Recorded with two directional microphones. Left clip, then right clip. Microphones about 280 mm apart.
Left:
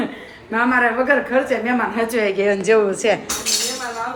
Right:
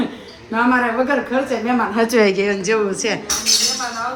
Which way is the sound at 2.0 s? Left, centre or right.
Right.